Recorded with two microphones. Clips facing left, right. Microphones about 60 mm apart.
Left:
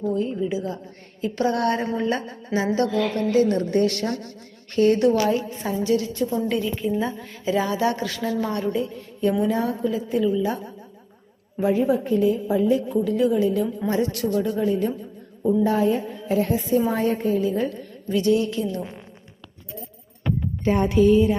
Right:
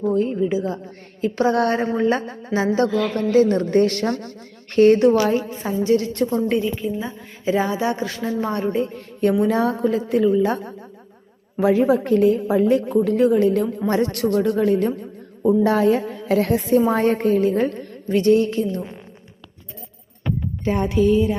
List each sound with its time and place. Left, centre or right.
0.0 s a woman's voice: right
6.7 s a woman's voice: centre
7.4 s a woman's voice: right
11.6 s a woman's voice: right
15.4 s a woman's voice: right